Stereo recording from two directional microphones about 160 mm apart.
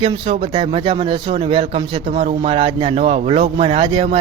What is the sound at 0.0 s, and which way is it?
Speech, 35° right (ahead or behind).